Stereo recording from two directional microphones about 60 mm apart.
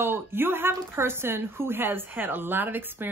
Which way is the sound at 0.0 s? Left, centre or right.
Right.